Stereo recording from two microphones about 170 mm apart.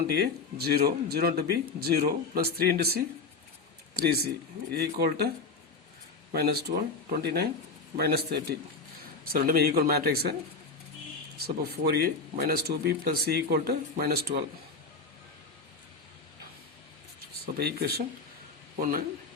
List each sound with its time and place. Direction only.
0.1 s speech: 70° right (ahead or behind)
6.3 s speech: 70° right (ahead or behind)
11.4 s speech: 70° right (ahead or behind)
17.4 s speech: 65° right (ahead or behind)
18.8 s speech: 55° right (ahead or behind)